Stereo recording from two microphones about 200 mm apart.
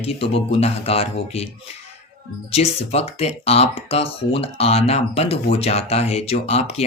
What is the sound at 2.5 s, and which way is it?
Speech, 30° left (ahead or behind).